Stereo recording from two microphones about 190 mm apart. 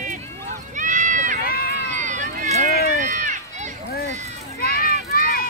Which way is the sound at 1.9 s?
40° right (ahead or behind).